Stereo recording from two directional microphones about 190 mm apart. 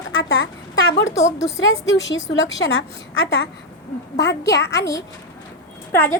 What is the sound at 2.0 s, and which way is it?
A woman's voice, 75° left (ahead or behind).